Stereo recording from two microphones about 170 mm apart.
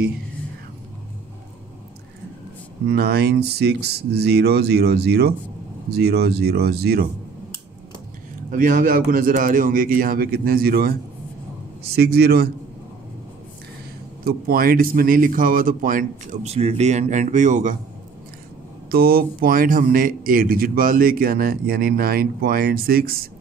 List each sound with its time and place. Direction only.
2.9 s speech: 70° right (ahead or behind)
8.5 s a man's voice: 50° right (ahead or behind); by 12.4 s 65° right (ahead or behind)
14.2 s speech: 60° right (ahead or behind)
18.9 s a man's voice: 60° right (ahead or behind)